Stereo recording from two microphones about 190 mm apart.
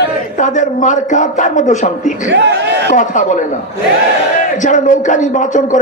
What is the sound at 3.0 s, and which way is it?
A man's voice, 40° left (ahead or behind).